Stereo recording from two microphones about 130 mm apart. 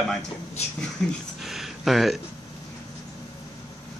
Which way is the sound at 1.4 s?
Centre (ahead or behind).